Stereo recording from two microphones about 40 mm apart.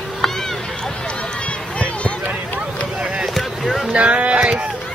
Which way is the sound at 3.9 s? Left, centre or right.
Right.